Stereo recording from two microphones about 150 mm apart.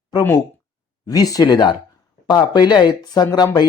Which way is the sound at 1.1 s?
25° left (ahead or behind).